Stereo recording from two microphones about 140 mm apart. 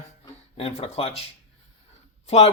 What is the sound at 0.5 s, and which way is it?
Speech, 45° left (ahead or behind).